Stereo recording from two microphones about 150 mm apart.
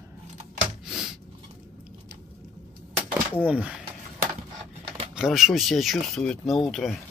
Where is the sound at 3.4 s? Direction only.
10° right (ahead or behind).